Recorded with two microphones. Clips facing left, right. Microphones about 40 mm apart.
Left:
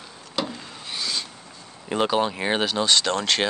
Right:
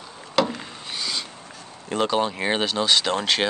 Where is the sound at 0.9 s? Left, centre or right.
Centre.